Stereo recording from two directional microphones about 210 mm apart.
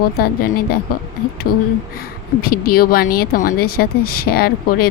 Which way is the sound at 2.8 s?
45° left (ahead or behind).